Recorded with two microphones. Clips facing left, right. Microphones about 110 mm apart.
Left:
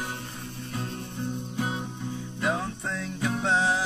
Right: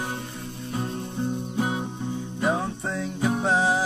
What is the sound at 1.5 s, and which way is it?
Music, 25° right (ahead or behind).